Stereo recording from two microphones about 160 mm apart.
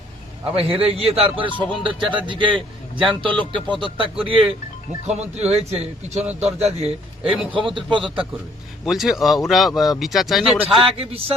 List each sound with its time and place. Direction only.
0.5 s speech: 35° right (ahead or behind)
5.0 s speech: 45° right (ahead or behind)
8.8 s speech: centre (ahead or behind)
10.8 s speech: 35° right (ahead or behind)